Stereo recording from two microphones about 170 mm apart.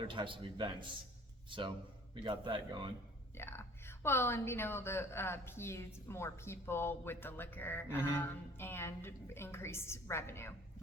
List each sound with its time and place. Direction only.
0.0 s a man's voice: 30° right (ahead or behind)
3.3 s a woman's voice: 15° left (ahead or behind)